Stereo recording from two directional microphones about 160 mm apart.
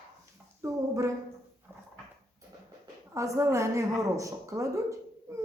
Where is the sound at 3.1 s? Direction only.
20° right (ahead or behind).